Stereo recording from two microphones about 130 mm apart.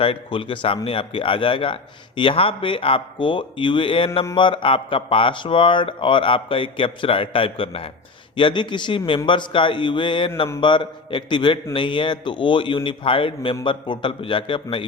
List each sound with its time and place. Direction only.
0.0 s speech: 45° left (ahead or behind)